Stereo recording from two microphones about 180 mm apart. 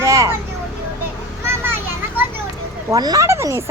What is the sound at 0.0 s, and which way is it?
Vehicle, 15° right (ahead or behind).